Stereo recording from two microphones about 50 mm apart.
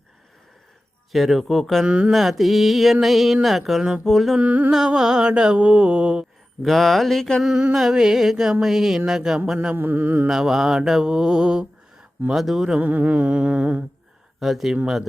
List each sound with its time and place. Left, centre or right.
1.1 s mantra: centre
1.8 s mantra: right
2.0 s mantra: centre
4.4 s humming: right
4.7 s mantra: centre
6.6 s mantra: centre
7.7 s mantra: centre
9.7 s mantra: right
10.2 s mantra: centre
12.8 s mantra: right
14.3 s speech: centre